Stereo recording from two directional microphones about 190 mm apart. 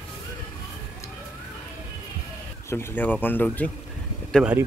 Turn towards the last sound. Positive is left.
turn(degrees=-5)  # may be behind; listen again after turning